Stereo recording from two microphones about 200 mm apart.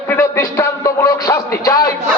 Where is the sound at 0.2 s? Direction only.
15° left (ahead or behind).